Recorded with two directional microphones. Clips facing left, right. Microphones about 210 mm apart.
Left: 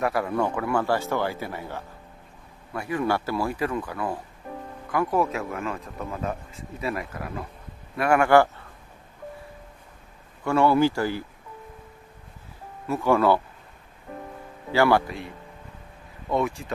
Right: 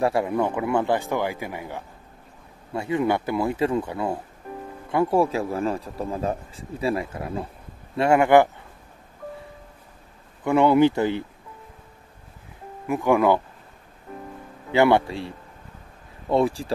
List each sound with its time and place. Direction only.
0.0 s a man's voice: 25° right (ahead or behind)
10.4 s speech: 20° right (ahead or behind)
12.8 s a man's voice: 15° right (ahead or behind)
14.7 s speech: 20° right (ahead or behind)